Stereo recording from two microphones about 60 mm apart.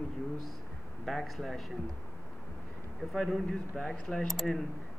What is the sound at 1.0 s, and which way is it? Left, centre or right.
Speech, centre.